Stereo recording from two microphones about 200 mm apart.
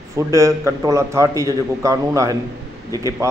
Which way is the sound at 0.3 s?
15° right (ahead or behind).